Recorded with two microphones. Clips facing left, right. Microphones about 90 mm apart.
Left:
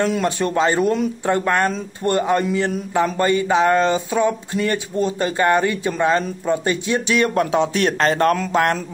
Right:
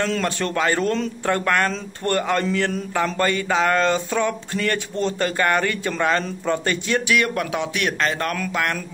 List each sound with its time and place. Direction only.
0.0 s a man's voice: 15° left (ahead or behind); by 8.7 s 35° left (ahead or behind)